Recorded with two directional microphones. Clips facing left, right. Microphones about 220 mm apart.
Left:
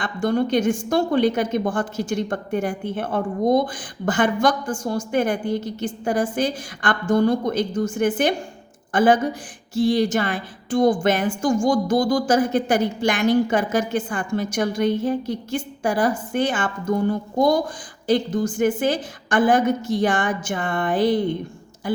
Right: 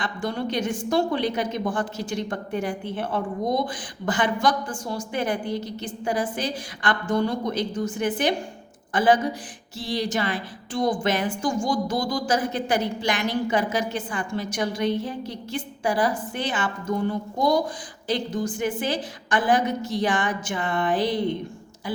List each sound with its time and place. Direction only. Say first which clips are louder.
0.0 s a woman's voice: left 7 dB; 50° left (ahead or behind)